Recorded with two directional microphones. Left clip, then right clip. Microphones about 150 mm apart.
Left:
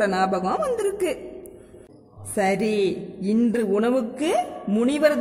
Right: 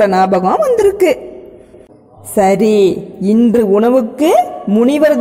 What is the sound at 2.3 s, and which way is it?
A woman's voice, 25° right (ahead or behind).